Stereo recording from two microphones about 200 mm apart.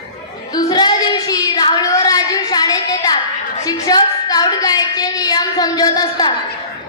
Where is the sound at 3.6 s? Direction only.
20° left (ahead or behind).